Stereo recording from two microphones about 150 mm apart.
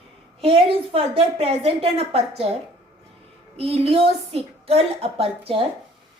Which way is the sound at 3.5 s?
40° right (ahead or behind).